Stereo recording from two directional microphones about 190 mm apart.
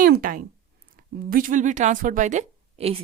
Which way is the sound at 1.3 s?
45° right (ahead or behind).